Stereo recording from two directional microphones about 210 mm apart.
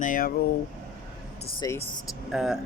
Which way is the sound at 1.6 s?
15° left (ahead or behind).